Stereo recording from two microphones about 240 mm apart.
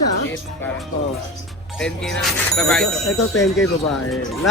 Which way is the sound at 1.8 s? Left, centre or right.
Centre.